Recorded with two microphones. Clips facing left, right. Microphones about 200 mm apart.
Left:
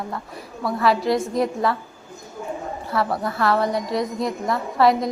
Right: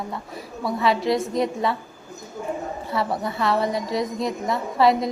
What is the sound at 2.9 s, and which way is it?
A woman's voice, centre (ahead or behind).